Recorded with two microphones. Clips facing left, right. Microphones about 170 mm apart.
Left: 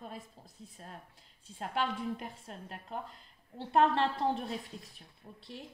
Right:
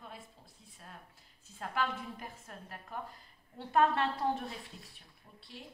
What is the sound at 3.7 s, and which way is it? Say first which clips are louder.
Speech: left 2 dB; 30° left (ahead or behind).